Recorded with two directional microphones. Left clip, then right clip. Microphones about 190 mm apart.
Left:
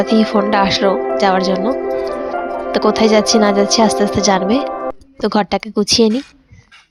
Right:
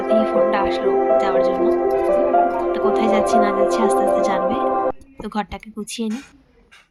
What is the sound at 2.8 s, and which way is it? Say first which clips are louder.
Speech: left 6 dB; 50° left (ahead or behind).